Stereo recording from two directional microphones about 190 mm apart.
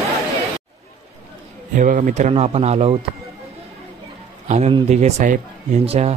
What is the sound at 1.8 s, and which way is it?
Speech, 45° right (ahead or behind).